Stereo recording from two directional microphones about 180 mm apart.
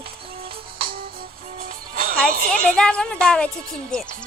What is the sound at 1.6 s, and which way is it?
Music, 50° right (ahead or behind).